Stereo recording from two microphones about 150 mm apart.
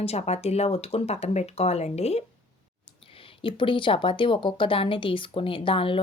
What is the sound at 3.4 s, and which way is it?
A woman's voice, 35° left (ahead or behind).